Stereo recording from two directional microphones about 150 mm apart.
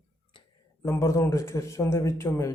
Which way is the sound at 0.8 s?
20° left (ahead or behind).